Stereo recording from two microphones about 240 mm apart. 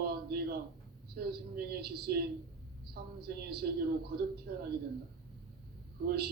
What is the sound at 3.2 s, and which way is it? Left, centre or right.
Speech, right.